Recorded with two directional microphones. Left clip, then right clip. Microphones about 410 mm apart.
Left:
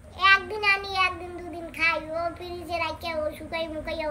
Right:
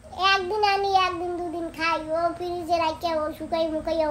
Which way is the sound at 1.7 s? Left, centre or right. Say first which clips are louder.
Left 1 dB; centre.